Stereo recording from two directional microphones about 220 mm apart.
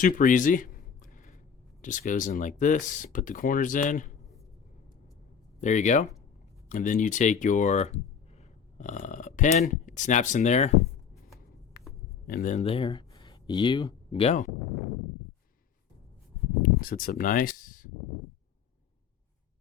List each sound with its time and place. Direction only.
0.0 s a sound: 35° left (ahead or behind)
1.8 s speech: 35° left (ahead or behind)
5.5 s speech: 35° left (ahead or behind)
11.8 s a sound: 45° left (ahead or behind)
12.3 s speech: 35° left (ahead or behind)
16.6 s speech: 40° left (ahead or behind)